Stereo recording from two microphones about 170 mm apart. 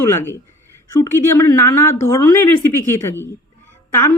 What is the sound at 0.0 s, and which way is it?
A woman's voice, 15° left (ahead or behind).